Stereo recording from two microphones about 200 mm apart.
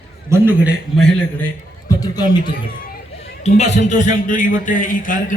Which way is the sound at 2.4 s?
45° left (ahead or behind).